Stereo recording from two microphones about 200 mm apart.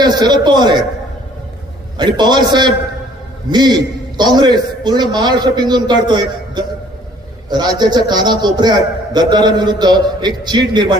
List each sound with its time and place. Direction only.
0.0 s a man's voice: 20° right (ahead or behind)
2.0 s a man's voice: 20° right (ahead or behind)